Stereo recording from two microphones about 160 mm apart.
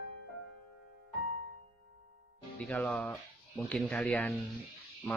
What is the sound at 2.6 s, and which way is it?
Speech, 10° left (ahead or behind).